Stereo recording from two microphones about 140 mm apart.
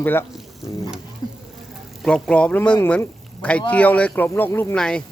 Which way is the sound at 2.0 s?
5° left (ahead or behind).